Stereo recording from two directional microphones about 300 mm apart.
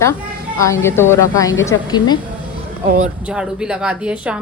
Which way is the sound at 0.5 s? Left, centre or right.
Centre.